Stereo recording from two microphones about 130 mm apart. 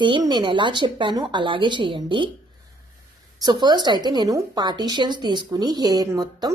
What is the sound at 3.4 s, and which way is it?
A woman's voice, 35° right (ahead or behind).